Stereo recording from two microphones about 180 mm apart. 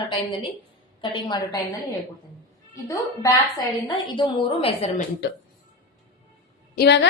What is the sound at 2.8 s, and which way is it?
A woman's voice, 20° left (ahead or behind).